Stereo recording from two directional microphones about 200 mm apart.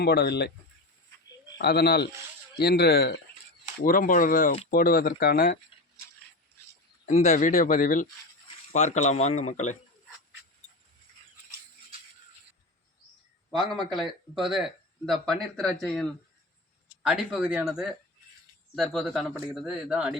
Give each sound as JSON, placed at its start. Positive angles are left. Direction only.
{"t": 0.0, "sound": "speech", "side_deg": 55}
{"t": 1.5, "sound": "speech", "side_deg": 50}
{"t": 7.0, "sound": "speech", "side_deg": 35}
{"t": 13.6, "sound": "speech", "side_deg": 0}